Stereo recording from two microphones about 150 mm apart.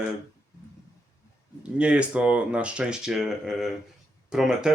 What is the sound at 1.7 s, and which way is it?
Speech, 10° right (ahead or behind).